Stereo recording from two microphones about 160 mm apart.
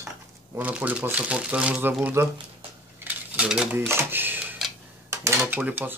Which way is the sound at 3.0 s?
5° right (ahead or behind).